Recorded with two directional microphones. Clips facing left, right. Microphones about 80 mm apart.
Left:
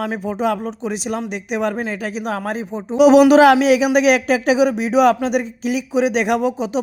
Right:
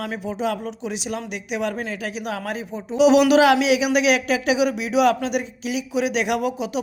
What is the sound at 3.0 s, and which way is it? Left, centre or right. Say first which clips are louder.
Speech: left 5 dB; left.